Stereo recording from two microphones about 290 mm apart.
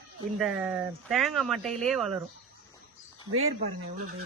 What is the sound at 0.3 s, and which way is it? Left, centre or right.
Speech, centre.